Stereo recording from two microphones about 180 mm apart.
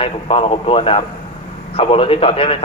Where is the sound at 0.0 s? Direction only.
30° left (ahead or behind).